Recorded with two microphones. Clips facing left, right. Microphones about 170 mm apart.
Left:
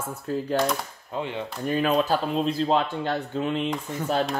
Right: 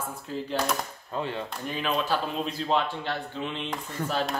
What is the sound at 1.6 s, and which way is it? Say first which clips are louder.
Speech: left 7 dB; 45° left (ahead or behind).